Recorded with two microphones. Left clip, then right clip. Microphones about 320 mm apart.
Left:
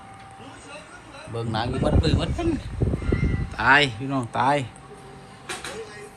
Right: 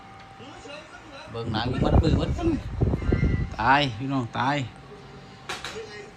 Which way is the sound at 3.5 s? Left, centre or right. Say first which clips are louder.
Left 3 dB; centre.